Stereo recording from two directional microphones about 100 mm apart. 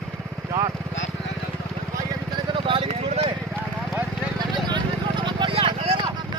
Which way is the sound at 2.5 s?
60° right (ahead or behind).